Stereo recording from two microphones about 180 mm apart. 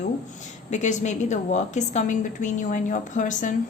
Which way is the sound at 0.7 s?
40° left (ahead or behind).